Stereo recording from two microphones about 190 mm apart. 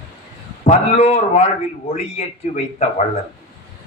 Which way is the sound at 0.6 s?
35° left (ahead or behind).